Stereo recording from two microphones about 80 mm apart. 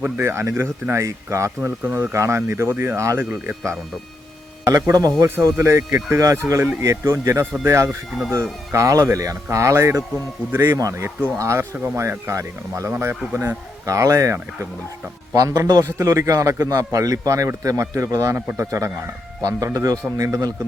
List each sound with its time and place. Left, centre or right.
0.0 s a man's voice: right
6.4 s speech: centre
6.8 s speech: right
7.9 s speech: centre
8.7 s speech: right
10.8 s a man's voice: right
13.8 s a man's voice: right
15.4 s a man's voice: right
19.5 s a man's voice: right